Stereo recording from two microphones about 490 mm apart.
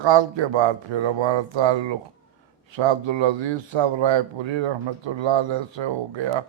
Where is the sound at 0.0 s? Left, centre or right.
Right.